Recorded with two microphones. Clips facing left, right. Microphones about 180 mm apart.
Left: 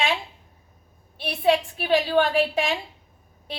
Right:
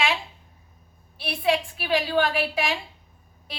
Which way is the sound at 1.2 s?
30° left (ahead or behind).